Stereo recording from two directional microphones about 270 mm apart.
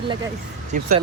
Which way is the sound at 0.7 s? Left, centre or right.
Right.